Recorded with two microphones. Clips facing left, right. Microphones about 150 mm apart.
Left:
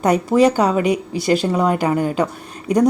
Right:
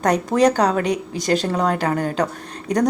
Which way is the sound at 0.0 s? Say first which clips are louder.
Left 2 dB; 5° left (ahead or behind).